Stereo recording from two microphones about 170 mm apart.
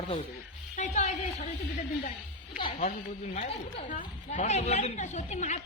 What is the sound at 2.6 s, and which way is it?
Speech, 40° left (ahead or behind).